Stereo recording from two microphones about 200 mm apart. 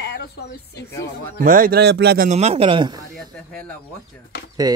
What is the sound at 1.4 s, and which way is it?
Speech, 45° right (ahead or behind).